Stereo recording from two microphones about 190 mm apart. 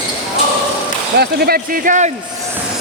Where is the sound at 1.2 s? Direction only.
55° right (ahead or behind).